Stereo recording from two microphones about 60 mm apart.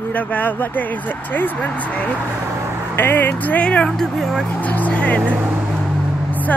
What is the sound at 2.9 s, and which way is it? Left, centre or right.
Speech, left.